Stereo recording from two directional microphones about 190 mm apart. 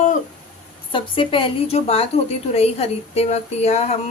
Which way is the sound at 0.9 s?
30° left (ahead or behind).